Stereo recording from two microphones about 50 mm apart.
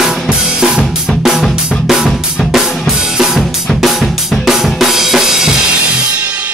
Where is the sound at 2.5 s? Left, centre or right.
Centre.